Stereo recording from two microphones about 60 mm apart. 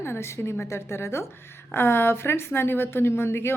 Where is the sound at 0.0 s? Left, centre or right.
Left.